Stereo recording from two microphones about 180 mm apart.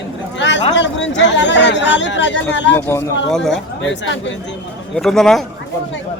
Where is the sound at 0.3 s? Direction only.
90° left.